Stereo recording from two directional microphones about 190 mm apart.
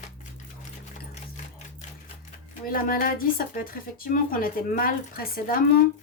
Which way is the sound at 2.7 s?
50° left (ahead or behind).